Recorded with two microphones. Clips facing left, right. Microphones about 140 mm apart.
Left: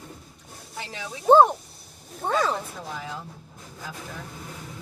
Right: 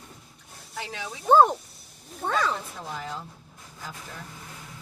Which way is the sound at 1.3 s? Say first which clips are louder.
Left 3 dB; 35° left (ahead or behind).